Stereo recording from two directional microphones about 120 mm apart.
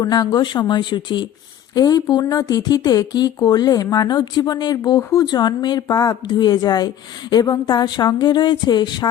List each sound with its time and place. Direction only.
0.0 s speech: 30° left (ahead or behind)